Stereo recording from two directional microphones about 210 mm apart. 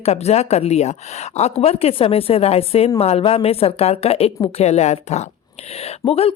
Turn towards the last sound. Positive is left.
turn(degrees=25)  # may be behind; listen again after turning